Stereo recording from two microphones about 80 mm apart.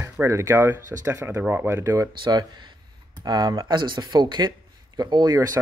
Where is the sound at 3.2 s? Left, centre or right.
Right.